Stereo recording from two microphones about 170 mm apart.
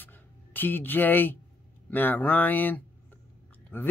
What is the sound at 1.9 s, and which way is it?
Speech, 10° left (ahead or behind).